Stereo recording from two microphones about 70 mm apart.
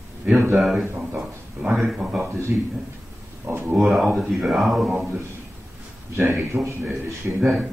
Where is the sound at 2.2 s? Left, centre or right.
Right.